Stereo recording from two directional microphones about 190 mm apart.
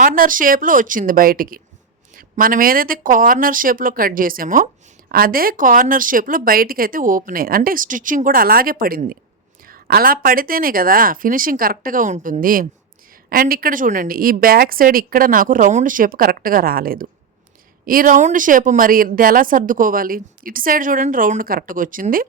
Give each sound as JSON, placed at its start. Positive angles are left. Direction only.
{"t": 0.0, "sound": "speech", "side_deg": -45}